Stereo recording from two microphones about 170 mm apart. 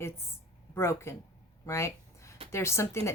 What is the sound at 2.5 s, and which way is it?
Speech, 15° left (ahead or behind).